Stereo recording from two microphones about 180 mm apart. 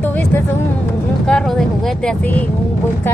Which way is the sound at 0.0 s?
10° left (ahead or behind).